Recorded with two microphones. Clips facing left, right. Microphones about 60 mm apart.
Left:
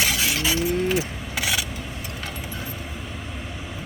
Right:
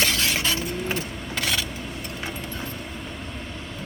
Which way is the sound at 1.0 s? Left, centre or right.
Centre.